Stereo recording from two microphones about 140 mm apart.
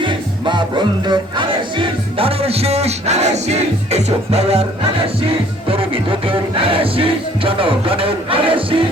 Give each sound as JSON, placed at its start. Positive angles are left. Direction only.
{"t": 0.0, "sound": "music", "side_deg": -35}
{"t": 5.6, "sound": "music", "side_deg": -40}